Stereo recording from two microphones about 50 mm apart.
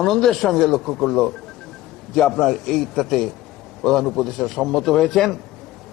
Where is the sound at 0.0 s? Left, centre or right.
Centre.